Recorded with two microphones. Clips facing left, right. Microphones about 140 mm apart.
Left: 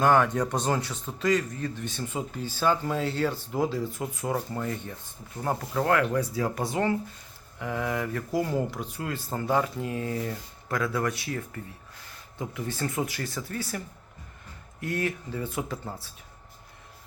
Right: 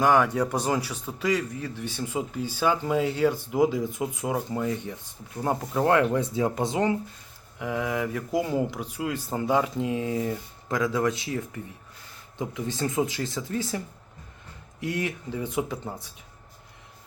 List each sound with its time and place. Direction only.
0.0 s a man's voice: 10° right (ahead or behind)